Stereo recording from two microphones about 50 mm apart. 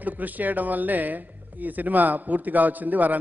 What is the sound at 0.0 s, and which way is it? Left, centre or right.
A man's voice, right.